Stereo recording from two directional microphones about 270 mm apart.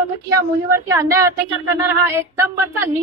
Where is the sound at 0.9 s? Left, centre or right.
Centre.